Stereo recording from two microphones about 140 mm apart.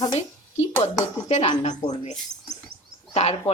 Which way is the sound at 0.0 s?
50° left (ahead or behind).